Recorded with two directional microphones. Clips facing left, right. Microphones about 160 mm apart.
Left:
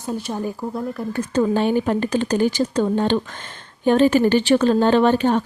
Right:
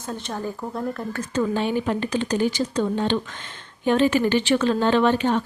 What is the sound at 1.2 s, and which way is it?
Speech, 40° left (ahead or behind).